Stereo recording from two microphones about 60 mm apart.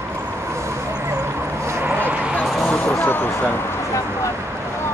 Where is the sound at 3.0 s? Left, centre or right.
Left.